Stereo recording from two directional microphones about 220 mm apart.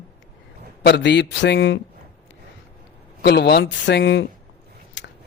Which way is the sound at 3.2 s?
50° left (ahead or behind).